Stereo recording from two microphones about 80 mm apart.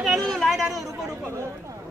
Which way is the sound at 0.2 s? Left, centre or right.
Centre.